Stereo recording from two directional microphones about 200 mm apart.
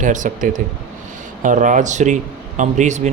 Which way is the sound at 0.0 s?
40° right (ahead or behind).